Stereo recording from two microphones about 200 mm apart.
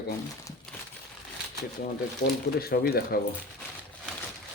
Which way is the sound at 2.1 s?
50° left (ahead or behind).